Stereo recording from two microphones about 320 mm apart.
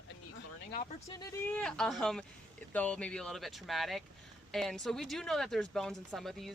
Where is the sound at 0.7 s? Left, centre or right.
Left.